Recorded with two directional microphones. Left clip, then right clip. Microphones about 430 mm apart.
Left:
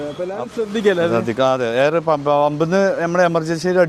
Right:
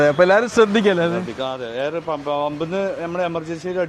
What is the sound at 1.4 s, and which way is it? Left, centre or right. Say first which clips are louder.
Speech: left 9 dB; left.